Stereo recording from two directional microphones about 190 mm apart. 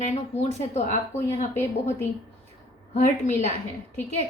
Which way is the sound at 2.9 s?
40° left (ahead or behind).